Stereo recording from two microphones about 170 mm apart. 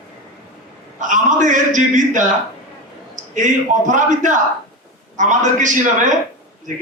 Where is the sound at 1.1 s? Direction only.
45° right (ahead or behind).